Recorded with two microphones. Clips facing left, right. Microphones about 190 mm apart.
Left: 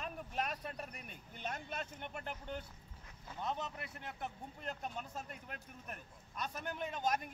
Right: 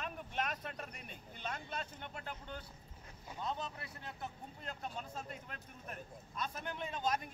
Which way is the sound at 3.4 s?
20° left (ahead or behind).